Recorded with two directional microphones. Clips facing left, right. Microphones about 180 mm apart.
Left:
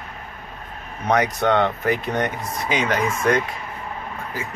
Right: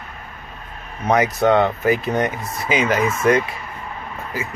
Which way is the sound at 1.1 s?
5° right (ahead or behind).